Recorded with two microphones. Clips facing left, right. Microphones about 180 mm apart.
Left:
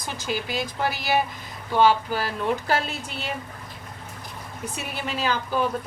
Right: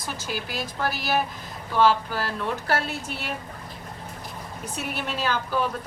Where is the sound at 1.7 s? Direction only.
15° left (ahead or behind).